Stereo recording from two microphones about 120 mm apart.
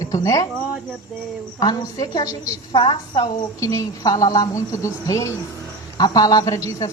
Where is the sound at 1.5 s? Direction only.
30° left (ahead or behind).